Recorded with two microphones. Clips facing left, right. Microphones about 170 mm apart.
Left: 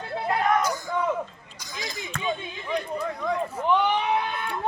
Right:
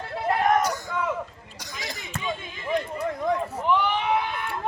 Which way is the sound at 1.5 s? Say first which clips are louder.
Left 1 dB; 70° right (ahead or behind).